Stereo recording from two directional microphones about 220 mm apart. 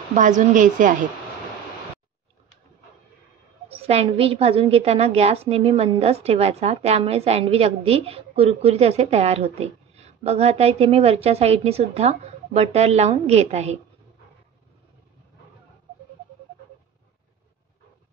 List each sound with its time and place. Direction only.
0.1 s a woman's voice: 35° right (ahead or behind)
3.7 s a woman's voice: 25° right (ahead or behind)